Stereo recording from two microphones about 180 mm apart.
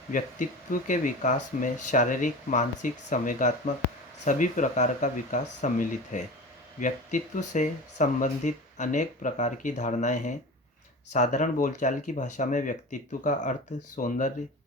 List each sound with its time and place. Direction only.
0.1 s speech: 45° left (ahead or behind)